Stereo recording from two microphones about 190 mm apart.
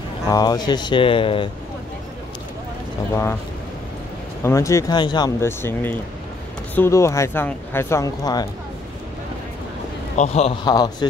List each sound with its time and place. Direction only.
0.3 s speech: 20° left (ahead or behind)
4.4 s speech: 15° left (ahead or behind)
10.1 s speech: 35° left (ahead or behind)